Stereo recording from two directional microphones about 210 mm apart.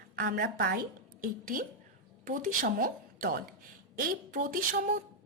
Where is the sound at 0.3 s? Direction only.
50° right (ahead or behind).